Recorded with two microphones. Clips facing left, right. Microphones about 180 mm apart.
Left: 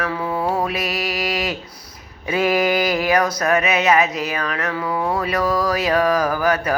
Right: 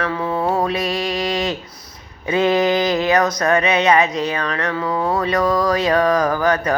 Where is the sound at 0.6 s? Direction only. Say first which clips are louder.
Right 3 dB; 5° left (ahead or behind).